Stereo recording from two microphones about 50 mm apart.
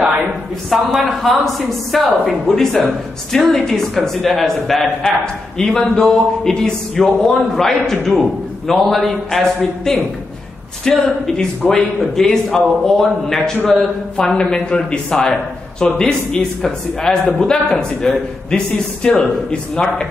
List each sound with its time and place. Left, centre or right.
0.7 s a man's voice: centre
11.0 s a man's voice: centre